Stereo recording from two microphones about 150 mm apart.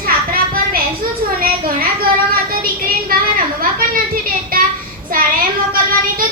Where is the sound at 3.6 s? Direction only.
70° right (ahead or behind).